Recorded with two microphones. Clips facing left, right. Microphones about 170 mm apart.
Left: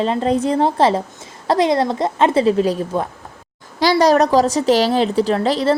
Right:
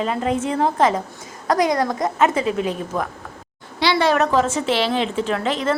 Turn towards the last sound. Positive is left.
turn(degrees=35)  # may be behind; listen again after turning